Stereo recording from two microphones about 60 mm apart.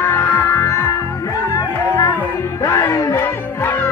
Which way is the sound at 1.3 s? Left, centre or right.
Left.